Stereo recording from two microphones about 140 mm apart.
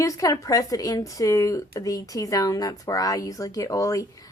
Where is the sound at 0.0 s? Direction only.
25° left (ahead or behind).